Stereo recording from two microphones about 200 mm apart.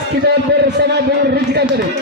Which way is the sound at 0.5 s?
60° right (ahead or behind).